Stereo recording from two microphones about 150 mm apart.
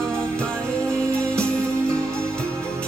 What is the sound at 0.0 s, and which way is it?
Music, 5° left (ahead or behind).